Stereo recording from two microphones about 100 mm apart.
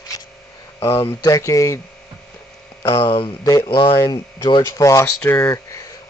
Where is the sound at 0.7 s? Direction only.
25° left (ahead or behind).